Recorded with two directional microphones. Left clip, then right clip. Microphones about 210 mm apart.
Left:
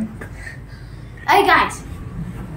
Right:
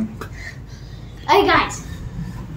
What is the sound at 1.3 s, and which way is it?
Speech, 35° left (ahead or behind).